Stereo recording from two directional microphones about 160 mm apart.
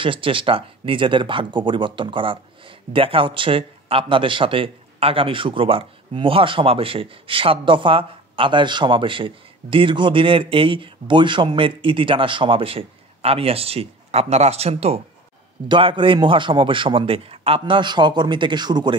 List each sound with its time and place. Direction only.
0.0 s speech: 35° right (ahead or behind)